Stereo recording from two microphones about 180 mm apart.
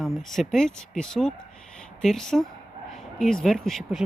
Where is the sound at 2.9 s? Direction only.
Centre (ahead or behind).